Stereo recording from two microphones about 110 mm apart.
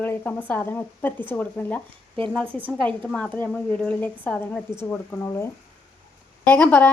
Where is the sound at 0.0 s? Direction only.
15° left (ahead or behind).